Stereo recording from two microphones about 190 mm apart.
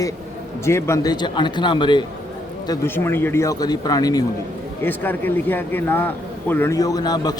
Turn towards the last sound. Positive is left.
turn(degrees=20)  # may be behind; listen again after turning